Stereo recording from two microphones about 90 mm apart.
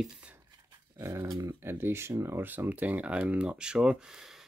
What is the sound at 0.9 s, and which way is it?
Dog, 35° right (ahead or behind).